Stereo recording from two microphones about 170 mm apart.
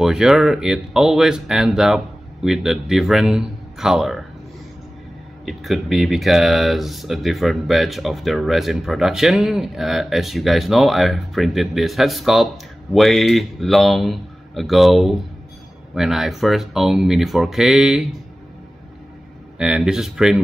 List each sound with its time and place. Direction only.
0.0 s speech: 5° right (ahead or behind)
5.4 s speech: centre (ahead or behind)
19.6 s speech: 5° right (ahead or behind)